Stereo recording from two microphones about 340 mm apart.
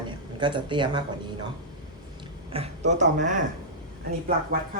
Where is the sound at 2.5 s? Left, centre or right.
Centre.